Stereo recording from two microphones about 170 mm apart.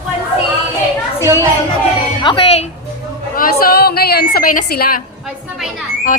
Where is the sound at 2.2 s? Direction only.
35° left (ahead or behind).